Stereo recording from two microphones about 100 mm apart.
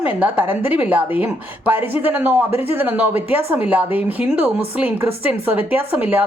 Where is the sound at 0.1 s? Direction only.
15° right (ahead or behind).